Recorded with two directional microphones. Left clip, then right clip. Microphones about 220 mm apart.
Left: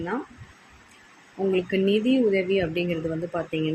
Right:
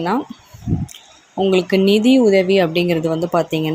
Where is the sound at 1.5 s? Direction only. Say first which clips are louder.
Right 8 dB; 35° right (ahead or behind).